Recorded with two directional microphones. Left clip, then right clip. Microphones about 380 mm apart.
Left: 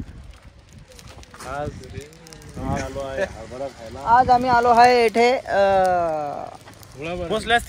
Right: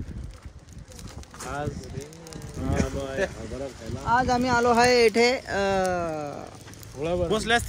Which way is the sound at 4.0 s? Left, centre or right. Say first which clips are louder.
Left 7 dB; centre.